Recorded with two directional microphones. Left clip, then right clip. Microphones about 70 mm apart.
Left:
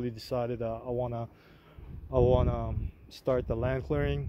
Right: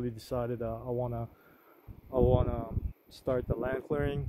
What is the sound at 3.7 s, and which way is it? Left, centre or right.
Speech, right.